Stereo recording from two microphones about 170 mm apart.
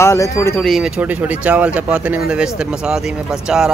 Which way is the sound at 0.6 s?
Centre (ahead or behind).